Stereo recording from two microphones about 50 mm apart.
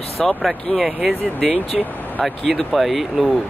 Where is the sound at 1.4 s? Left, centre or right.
Right.